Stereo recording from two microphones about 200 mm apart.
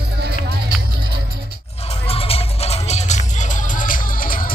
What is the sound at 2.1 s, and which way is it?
Music, 30° left (ahead or behind).